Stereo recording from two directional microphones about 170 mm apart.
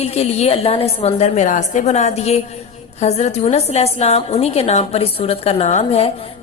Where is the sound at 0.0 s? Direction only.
40° left (ahead or behind).